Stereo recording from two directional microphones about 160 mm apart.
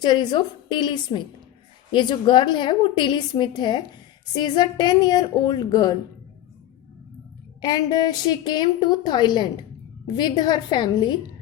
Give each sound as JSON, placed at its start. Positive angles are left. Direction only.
{"t": 0.0, "sound": "a woman's voice", "side_deg": 25}
{"t": 7.6, "sound": "a woman's voice", "side_deg": 25}